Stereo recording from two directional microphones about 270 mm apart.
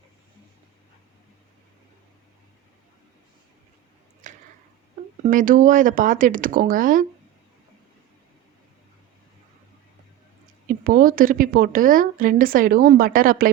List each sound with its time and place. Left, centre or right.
4.2 s squish: right
5.2 s speech: right
10.7 s a woman's voice: right